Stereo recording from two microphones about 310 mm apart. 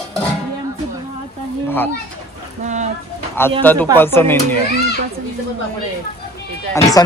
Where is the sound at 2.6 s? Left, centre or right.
Right.